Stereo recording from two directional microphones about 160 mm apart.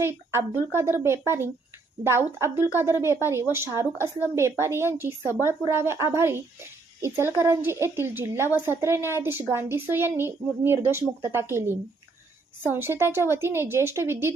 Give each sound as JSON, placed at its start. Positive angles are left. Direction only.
{"t": 0.0, "sound": "a woman's voice", "side_deg": -15}